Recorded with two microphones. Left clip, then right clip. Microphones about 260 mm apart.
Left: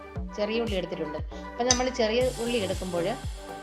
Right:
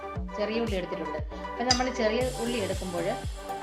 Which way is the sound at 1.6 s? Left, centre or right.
Left.